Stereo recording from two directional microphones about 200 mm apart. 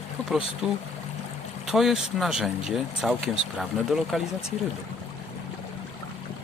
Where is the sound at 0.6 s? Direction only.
5° right (ahead or behind).